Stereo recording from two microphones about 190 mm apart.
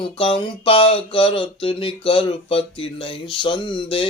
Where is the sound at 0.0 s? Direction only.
25° left (ahead or behind).